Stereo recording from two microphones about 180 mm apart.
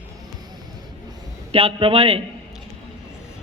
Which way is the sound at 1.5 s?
35° right (ahead or behind).